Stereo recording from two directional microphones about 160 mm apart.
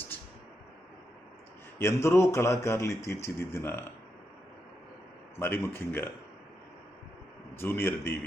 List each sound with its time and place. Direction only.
1.8 s speech: 15° left (ahead or behind)
5.4 s speech: 15° left (ahead or behind)
7.5 s speech: 15° left (ahead or behind)